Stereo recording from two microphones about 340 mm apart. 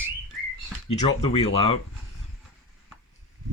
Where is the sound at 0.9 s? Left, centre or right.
Centre.